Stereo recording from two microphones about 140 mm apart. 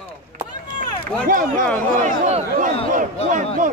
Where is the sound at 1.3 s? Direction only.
70° right (ahead or behind).